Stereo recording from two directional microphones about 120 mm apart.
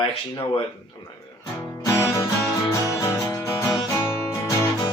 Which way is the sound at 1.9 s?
25° left (ahead or behind).